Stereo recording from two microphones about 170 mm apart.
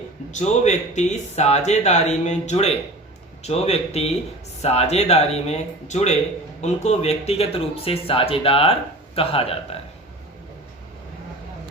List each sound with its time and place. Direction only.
0.3 s speech: 45° left (ahead or behind)